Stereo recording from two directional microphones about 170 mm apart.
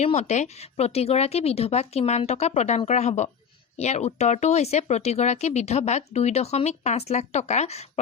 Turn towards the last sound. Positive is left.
turn(degrees=40)  # may be behind; listen again after turning